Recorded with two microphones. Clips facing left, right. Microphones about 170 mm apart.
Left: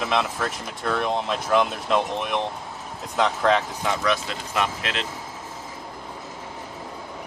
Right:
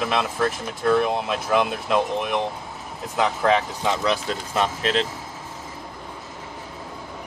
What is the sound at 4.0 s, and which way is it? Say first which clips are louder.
Speech: right 1 dB; 30° right (ahead or behind).